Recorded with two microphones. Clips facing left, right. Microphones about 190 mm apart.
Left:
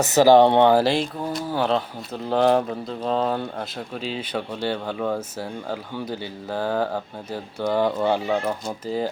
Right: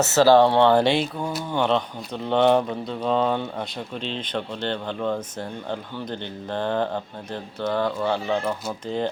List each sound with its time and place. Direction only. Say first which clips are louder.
0.0 s speech: left 1 dB; 15° left (ahead or behind)
0.7 s speech: even; centre (ahead or behind)